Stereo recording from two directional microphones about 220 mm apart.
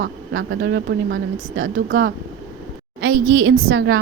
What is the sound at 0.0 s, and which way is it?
Speech, 55° right (ahead or behind).